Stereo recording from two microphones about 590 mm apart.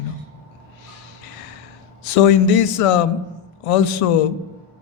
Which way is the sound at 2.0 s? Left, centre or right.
Left.